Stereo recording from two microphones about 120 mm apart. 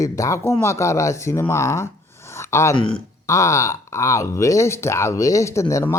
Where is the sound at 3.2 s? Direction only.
25° left (ahead or behind).